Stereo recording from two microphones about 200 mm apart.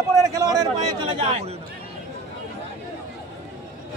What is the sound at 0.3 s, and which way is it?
A man's voice, 15° right (ahead or behind).